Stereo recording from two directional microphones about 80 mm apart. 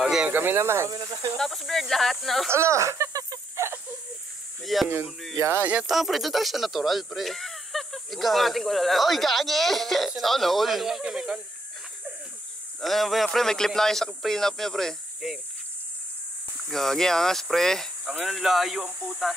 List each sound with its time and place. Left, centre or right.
0.0 s snake: centre
0.3 s speech: right
1.4 s speech: centre
2.5 s a sound: right
3.6 s a sound: right
4.7 s speech: centre
5.6 s speech: centre
5.9 s speech: centre
12.8 s speech: centre
16.7 s speech: centre